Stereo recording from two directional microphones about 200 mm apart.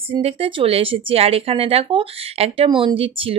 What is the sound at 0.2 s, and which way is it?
Speech, 30° right (ahead or behind).